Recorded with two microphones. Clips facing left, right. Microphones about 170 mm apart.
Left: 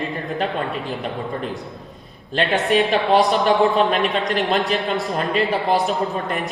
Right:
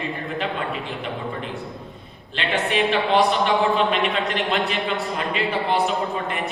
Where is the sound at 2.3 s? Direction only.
40° left (ahead or behind).